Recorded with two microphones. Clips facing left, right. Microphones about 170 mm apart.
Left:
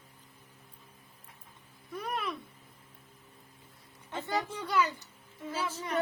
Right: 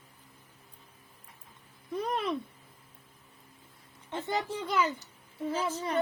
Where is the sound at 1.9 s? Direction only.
30° right (ahead or behind).